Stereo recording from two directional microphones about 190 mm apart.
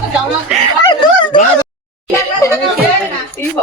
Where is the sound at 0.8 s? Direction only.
25° left (ahead or behind).